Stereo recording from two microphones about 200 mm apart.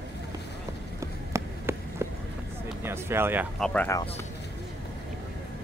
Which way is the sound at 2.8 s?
10° right (ahead or behind).